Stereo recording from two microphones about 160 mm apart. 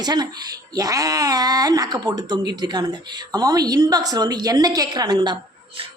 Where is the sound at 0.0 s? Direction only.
25° right (ahead or behind).